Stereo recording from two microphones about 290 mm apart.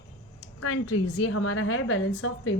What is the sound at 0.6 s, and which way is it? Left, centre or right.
A woman's voice, left.